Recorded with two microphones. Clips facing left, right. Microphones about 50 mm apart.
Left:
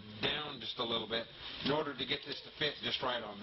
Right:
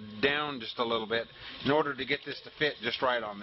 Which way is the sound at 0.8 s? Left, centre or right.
Right.